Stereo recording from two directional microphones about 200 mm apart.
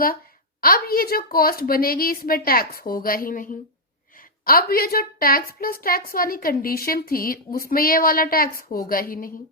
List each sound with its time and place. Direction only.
0.6 s a woman's voice: 45° left (ahead or behind)